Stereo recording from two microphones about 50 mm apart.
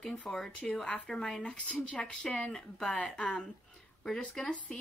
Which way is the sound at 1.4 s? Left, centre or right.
Left.